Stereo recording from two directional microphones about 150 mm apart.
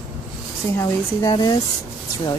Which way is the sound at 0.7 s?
20° left (ahead or behind).